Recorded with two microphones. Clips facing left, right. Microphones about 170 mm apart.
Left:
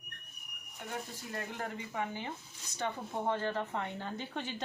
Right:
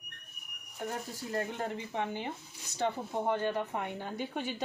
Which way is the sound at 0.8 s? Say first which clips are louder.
Right 4 dB; 35° right (ahead or behind).